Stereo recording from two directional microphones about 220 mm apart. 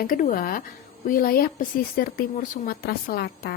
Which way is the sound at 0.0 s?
40° left (ahead or behind).